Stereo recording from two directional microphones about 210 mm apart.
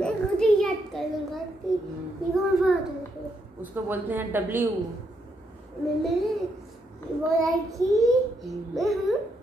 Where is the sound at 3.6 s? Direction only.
10° right (ahead or behind).